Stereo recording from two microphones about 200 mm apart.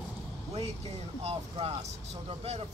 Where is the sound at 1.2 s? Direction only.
30° right (ahead or behind).